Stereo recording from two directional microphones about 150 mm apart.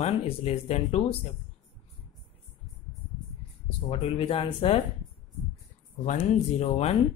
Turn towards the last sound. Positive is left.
turn(degrees=45)  # may be behind; listen again after turning